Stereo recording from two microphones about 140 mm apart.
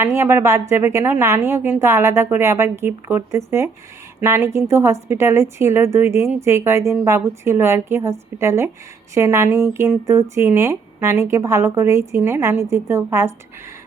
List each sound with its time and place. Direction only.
0.0 s a woman's voice: 20° right (ahead or behind)